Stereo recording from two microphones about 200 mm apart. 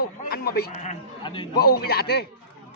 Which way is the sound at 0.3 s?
50° left (ahead or behind).